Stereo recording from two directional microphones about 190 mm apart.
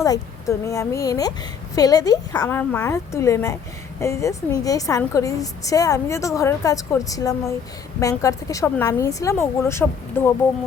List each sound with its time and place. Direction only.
0.0 s a woman's voice: 15° left (ahead or behind)